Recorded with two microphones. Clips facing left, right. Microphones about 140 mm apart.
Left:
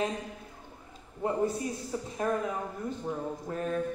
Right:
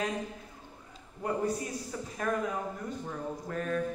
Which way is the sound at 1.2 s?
25° left (ahead or behind).